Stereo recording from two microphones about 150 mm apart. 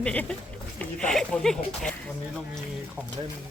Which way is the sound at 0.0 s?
10° left (ahead or behind).